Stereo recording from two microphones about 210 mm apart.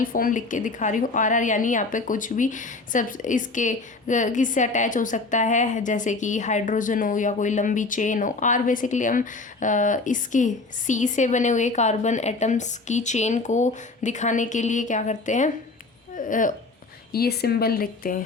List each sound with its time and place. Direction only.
0.0 s a woman's voice: 40° left (ahead or behind)